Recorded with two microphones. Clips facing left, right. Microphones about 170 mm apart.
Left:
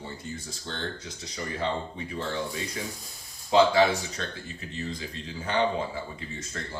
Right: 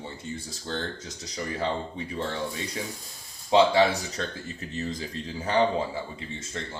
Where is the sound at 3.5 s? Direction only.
35° right (ahead or behind).